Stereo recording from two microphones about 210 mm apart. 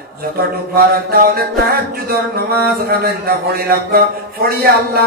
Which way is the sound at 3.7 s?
45° right (ahead or behind).